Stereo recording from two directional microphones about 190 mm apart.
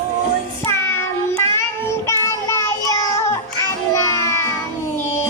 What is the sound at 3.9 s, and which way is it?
Music, 15° left (ahead or behind).